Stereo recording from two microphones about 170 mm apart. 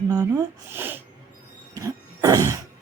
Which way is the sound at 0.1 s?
20° right (ahead or behind).